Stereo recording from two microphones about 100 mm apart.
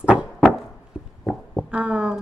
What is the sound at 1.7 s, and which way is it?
Speech, 10° right (ahead or behind).